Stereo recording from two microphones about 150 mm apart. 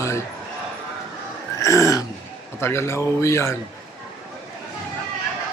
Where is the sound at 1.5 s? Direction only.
20° left (ahead or behind).